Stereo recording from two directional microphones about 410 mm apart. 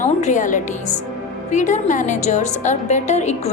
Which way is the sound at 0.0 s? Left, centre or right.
Centre.